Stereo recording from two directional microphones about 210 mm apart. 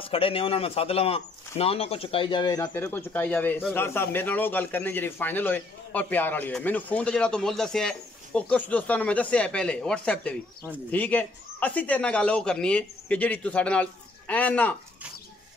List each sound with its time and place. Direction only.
0.0 s a man's voice: 25° left (ahead or behind); by 14.8 s 5° left (ahead or behind)